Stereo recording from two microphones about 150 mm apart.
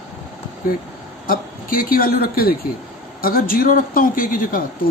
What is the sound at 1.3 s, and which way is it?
A man's voice, 75° left (ahead or behind).